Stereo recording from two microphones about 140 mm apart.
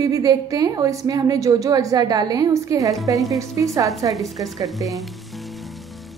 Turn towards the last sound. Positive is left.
turn(degrees=0)  # may be behind; listen again after turning